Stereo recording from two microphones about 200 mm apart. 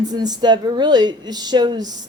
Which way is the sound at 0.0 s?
20° right (ahead or behind).